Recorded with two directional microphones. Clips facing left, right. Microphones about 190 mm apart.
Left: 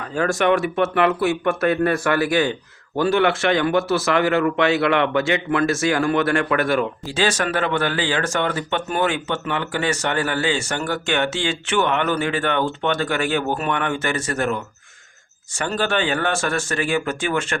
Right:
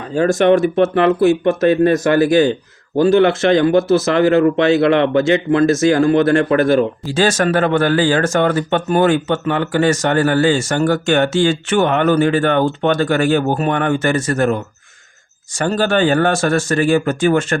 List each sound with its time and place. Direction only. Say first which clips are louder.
0.0 s speech: right 6 dB; 25° right (ahead or behind)
2.3 s speech: right 7 dB; 40° right (ahead or behind)
3.0 s speech: right 6 dB; 25° right (ahead or behind)
3.5 s speech: right 7 dB; 40° right (ahead or behind)
3.8 s speech: right 6 dB; 25° right (ahead or behind); by 17.6 s 40° right (ahead or behind)